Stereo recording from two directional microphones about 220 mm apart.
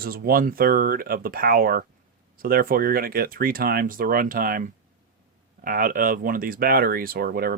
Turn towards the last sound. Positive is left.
turn(degrees=-45)  # may be behind; listen again after turning